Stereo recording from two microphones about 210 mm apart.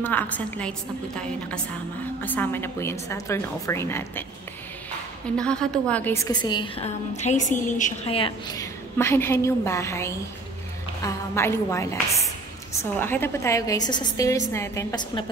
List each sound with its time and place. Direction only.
0.0 s a woman's voice: 10° left (ahead or behind)
5.4 s a woman's voice: 5° left (ahead or behind); by 8.2 s 35° left (ahead or behind)
8.2 s a woman's voice: 15° left (ahead or behind)
13.0 s a woman's voice: 10° left (ahead or behind)